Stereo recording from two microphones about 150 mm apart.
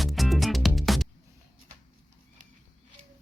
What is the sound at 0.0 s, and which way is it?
Music, centre (ahead or behind).